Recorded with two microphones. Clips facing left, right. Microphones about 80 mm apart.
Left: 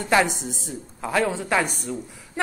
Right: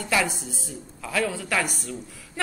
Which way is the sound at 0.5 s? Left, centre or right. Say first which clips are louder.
Left 4 dB; left.